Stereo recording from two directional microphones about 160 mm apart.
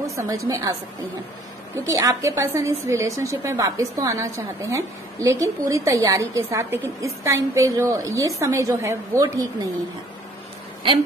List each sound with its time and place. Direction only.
0.0 s a woman's voice: 20° right (ahead or behind)
1.9 s a woman's voice: 20° right (ahead or behind)